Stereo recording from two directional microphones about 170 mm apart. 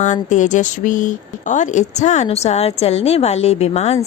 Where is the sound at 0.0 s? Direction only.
45° left (ahead or behind).